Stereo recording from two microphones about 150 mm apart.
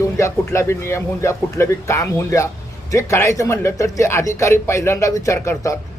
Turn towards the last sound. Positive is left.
turn(degrees=20)  # may be behind; listen again after turning